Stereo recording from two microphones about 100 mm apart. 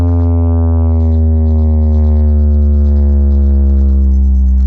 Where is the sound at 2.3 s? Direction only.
30° right (ahead or behind).